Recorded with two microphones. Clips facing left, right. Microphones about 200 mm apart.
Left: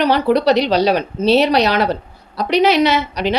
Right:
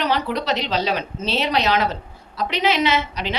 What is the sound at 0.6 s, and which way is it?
A woman's voice, 35° left (ahead or behind).